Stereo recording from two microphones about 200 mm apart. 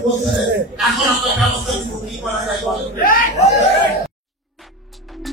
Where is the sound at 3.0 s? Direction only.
45° left (ahead or behind).